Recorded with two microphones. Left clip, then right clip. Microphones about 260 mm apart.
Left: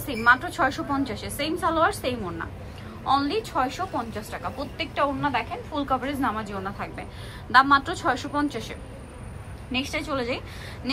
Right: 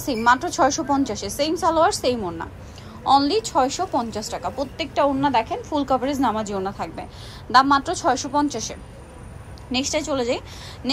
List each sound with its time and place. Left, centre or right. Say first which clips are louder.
0.2 s a woman's voice: right 2 dB; centre
9.7 s a woman's voice: right 5 dB; centre